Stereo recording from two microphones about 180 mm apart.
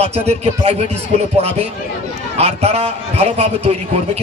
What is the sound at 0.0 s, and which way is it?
A man's voice, 35° right (ahead or behind).